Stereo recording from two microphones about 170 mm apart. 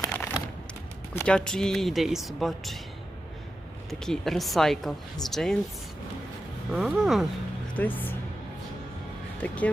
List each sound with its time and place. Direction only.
0.1 s a sound: 15° left (ahead or behind)
1.1 s speech: 5° left (ahead or behind)
3.8 s speech: centre (ahead or behind)
6.7 s speech: 5° right (ahead or behind)
7.8 s speech: 10° left (ahead or behind)
9.4 s speech: 10° left (ahead or behind)